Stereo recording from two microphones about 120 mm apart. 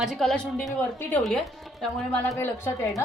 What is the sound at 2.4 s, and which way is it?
Speech, 20° left (ahead or behind).